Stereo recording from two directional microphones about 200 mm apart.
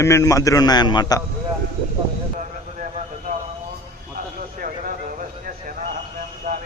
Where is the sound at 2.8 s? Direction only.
40° right (ahead or behind).